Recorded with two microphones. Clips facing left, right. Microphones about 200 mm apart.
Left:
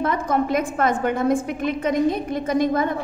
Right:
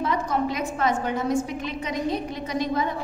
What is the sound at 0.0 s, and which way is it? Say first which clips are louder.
A woman's voice: left 3 dB; 50° left (ahead or behind).